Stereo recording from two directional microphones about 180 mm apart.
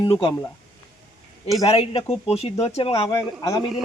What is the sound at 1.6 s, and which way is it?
Speech, 30° left (ahead or behind).